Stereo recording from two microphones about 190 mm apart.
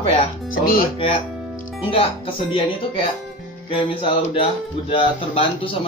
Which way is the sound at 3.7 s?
30° left (ahead or behind).